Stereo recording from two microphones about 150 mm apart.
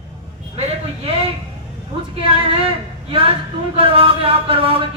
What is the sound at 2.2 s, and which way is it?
A woman's voice, 40° right (ahead or behind).